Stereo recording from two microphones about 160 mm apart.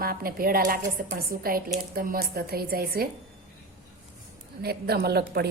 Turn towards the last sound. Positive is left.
turn(degrees=-80)